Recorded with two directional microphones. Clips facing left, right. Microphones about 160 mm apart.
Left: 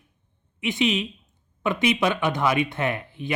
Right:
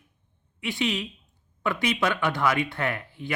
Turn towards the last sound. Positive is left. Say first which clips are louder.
# left 3 dB
turn(degrees=20)  # may be behind; listen again after turning